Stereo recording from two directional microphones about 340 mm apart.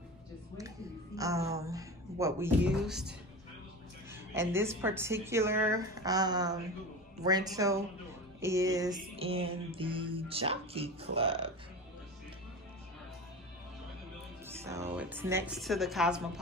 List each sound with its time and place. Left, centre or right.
0.6 s a woman's voice: centre
4.1 s music: centre
14.4 s a woman's voice: centre